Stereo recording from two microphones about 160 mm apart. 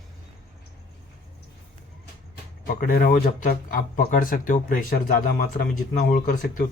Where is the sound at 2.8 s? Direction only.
60° left (ahead or behind).